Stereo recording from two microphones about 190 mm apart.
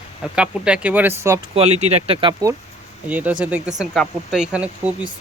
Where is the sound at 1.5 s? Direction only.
35° right (ahead or behind).